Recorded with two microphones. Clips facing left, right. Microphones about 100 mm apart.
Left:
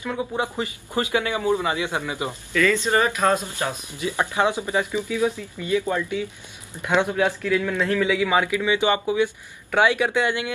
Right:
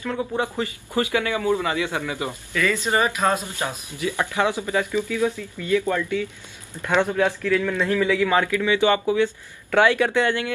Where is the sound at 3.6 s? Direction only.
20° left (ahead or behind).